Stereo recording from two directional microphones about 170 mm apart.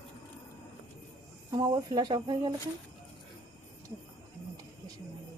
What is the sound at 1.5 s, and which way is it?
Speech, 25° right (ahead or behind).